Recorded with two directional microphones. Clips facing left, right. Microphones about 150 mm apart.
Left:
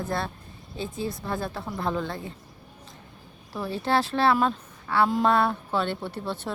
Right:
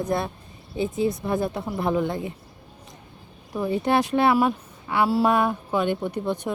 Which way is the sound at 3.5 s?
20° right (ahead or behind).